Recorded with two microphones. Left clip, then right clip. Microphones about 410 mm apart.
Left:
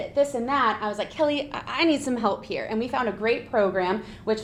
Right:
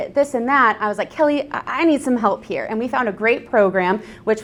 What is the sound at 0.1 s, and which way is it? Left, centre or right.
A woman's voice, right.